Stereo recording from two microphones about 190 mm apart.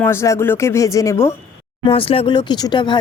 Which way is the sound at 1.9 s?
30° left (ahead or behind).